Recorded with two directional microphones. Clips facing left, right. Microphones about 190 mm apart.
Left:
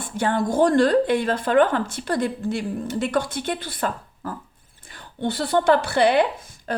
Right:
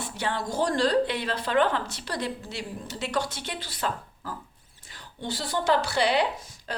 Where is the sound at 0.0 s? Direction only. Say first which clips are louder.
Left 8 dB; 50° left (ahead or behind).